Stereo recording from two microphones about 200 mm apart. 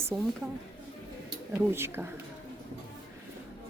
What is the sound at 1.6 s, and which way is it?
Speech, 10° right (ahead or behind).